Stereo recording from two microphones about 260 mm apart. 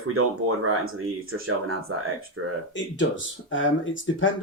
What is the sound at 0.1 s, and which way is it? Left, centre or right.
Speech, right.